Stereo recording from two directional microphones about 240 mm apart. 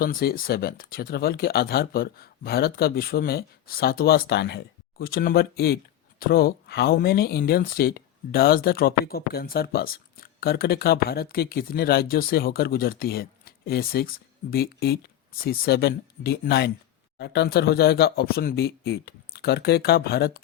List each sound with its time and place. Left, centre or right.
0.0 s speech: left